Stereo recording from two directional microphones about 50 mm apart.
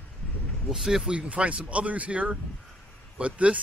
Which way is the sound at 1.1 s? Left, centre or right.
Right.